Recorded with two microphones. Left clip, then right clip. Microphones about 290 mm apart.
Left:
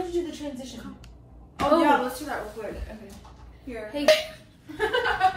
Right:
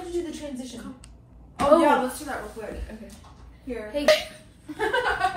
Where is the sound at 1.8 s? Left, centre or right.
Centre.